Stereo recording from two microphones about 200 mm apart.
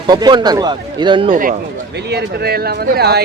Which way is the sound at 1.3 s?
45° right (ahead or behind).